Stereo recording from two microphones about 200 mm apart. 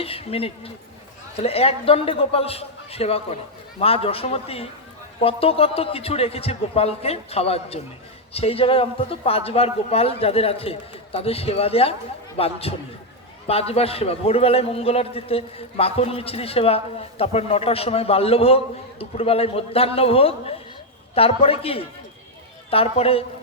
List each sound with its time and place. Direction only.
0.0 s a man's voice: 30° left (ahead or behind)